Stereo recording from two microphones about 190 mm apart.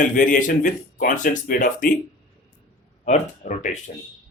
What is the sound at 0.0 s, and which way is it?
Speech, 45° left (ahead or behind).